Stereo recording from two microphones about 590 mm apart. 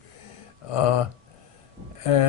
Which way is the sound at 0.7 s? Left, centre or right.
Left.